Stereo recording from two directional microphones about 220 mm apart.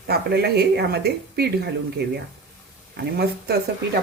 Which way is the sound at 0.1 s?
45° right (ahead or behind).